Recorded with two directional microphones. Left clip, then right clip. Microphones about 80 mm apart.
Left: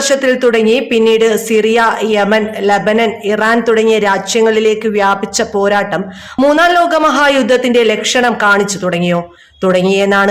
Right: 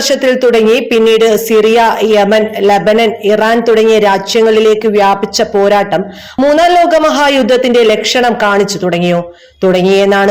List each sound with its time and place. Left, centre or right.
0.1 s a man's voice: right